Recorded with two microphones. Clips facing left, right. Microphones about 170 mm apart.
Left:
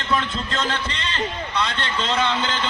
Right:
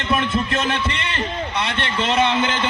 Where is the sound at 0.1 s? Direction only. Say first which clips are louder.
Right 4 dB; 20° right (ahead or behind).